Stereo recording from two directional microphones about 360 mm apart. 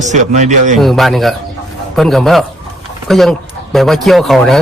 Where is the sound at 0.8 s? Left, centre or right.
Centre.